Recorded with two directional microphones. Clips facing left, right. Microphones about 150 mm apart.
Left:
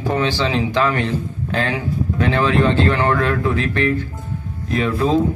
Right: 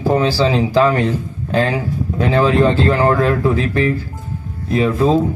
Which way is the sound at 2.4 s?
35° right (ahead or behind).